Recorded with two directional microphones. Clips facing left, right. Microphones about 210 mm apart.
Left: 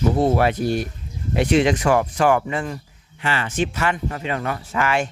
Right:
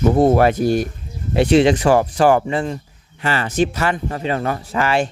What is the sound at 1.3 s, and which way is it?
Speech, 30° right (ahead or behind).